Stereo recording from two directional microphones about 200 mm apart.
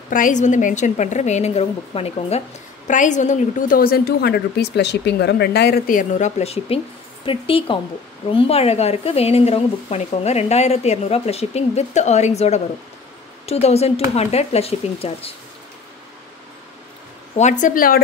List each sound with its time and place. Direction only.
0.1 s a woman's voice: 40° left (ahead or behind)
17.4 s speech: 40° left (ahead or behind)